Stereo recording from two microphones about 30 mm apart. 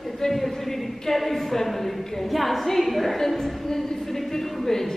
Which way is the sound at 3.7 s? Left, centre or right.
Centre.